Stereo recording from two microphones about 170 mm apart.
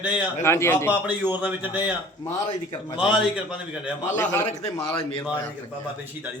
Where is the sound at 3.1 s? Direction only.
5° right (ahead or behind).